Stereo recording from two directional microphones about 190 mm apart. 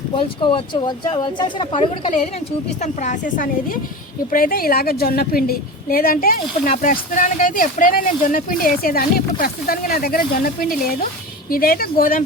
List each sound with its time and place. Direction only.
0.2 s speech: 25° left (ahead or behind)
2.8 s a woman's voice: 40° left (ahead or behind)